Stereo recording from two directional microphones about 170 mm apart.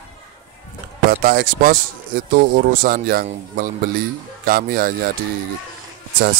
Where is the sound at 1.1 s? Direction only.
55° right (ahead or behind).